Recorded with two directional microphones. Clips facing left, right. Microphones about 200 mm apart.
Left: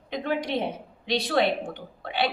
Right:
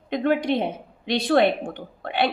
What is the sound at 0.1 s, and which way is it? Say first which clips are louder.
A woman's voice: right 6 dB; 55° right (ahead or behind).